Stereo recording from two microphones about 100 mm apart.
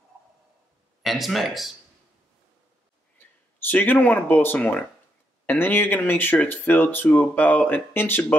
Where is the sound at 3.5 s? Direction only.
20° left (ahead or behind).